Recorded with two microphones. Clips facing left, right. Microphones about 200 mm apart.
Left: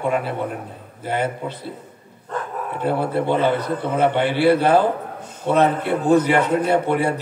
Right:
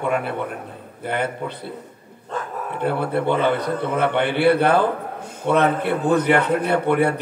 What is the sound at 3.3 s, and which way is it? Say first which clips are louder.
A man's voice: even; 60° right (ahead or behind).